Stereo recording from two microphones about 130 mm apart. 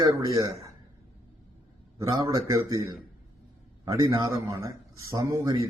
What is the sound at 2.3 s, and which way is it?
Speech, 25° right (ahead or behind).